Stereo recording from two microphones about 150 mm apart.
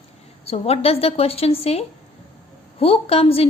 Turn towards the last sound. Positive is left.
turn(degrees=40)  # may be behind; listen again after turning